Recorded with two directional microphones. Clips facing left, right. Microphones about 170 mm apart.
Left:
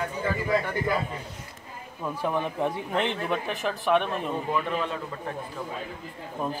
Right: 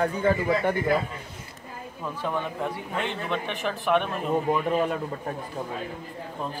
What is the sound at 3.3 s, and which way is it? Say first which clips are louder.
Speech: even; centre (ahead or behind).